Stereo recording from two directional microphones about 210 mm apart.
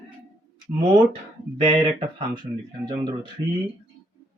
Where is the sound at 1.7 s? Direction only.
20° right (ahead or behind).